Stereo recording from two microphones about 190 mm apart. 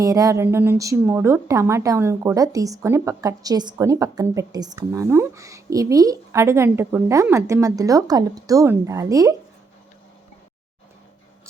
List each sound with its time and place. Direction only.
0.0 s a woman's voice: 15° right (ahead or behind)